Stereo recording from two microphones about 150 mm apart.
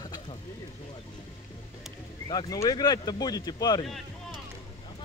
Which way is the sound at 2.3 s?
25° left (ahead or behind).